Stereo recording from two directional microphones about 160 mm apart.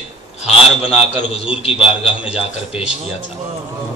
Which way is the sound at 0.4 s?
40° left (ahead or behind).